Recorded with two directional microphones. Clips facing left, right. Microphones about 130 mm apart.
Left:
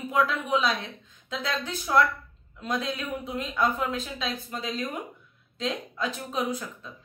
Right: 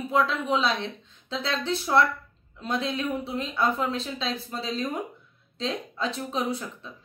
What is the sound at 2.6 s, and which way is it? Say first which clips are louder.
A woman's voice: right 2 dB; 30° right (ahead or behind).